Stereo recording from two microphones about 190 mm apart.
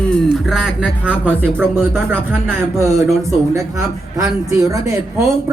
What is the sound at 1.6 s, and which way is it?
Speech, 5° left (ahead or behind).